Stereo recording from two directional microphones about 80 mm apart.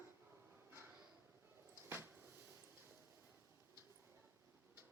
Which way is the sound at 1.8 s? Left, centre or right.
Right.